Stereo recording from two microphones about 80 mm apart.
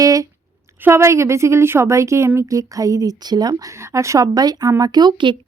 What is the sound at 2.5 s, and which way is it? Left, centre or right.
Speech, right.